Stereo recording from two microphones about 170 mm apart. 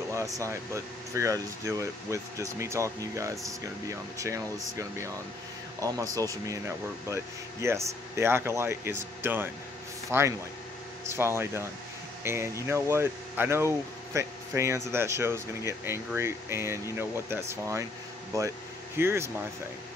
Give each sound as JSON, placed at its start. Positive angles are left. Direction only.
{"t": 0.1, "sound": "speech", "side_deg": -20}
{"t": 4.7, "sound": "speech", "side_deg": -15}
{"t": 7.6, "sound": "speech", "side_deg": -15}
{"t": 18.9, "sound": "speech", "side_deg": -15}